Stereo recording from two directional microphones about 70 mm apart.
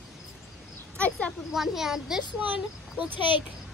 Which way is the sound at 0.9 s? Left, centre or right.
Centre.